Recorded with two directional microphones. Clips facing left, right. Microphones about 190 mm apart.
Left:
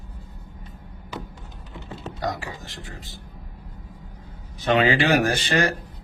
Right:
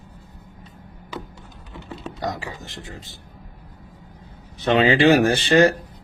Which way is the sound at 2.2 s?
20° right (ahead or behind).